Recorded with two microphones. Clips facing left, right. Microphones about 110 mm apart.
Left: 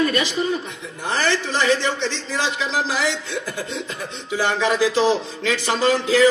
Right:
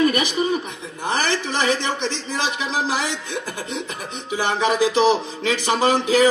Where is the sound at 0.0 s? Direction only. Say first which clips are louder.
Right 1 dB; 15° right (ahead or behind).